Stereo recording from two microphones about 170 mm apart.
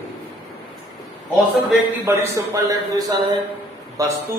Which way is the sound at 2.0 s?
20° right (ahead or behind).